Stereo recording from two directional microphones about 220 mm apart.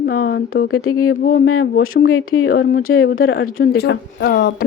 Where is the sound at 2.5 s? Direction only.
40° left (ahead or behind).